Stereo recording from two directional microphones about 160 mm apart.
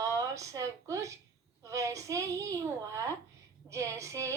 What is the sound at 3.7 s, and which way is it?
Speech, 20° right (ahead or behind).